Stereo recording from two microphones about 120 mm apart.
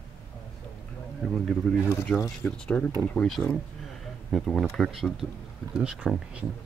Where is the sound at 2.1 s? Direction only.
25° left (ahead or behind).